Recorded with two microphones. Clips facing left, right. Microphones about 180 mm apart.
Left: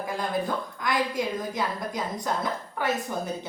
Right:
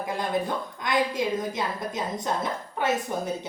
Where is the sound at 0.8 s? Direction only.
20° right (ahead or behind).